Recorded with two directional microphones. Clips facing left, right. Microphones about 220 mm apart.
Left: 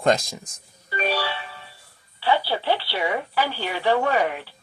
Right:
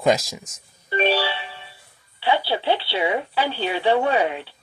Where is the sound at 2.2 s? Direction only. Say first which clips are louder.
Right 1 dB; 15° right (ahead or behind).